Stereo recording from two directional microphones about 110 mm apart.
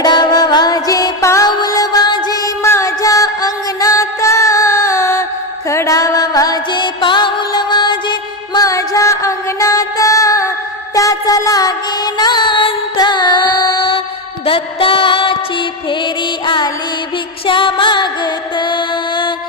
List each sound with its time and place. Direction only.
0.0 s music: 40° left (ahead or behind)